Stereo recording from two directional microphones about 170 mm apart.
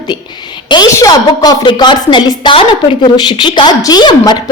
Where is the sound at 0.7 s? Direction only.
20° left (ahead or behind).